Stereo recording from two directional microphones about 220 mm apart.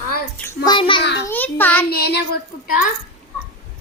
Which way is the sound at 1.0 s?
50° left (ahead or behind).